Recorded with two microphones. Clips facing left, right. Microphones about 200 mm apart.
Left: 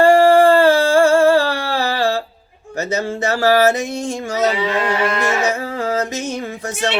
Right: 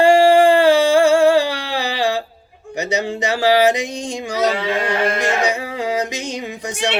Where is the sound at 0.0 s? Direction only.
15° right (ahead or behind).